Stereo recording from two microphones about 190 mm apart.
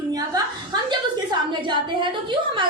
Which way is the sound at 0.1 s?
20° right (ahead or behind).